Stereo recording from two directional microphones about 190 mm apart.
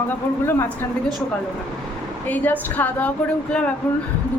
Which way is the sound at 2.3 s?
10° left (ahead or behind).